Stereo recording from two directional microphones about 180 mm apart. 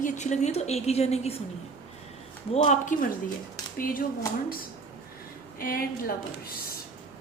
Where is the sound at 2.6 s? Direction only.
45° left (ahead or behind).